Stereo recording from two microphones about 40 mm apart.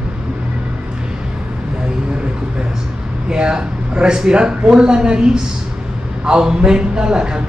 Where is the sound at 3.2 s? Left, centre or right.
Centre.